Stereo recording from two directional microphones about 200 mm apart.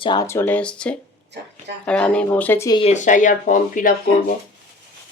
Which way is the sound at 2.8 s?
35° left (ahead or behind).